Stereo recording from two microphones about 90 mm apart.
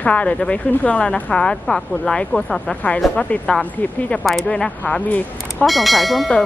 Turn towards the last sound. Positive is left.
turn(degrees=0)  # may be behind; listen again after turning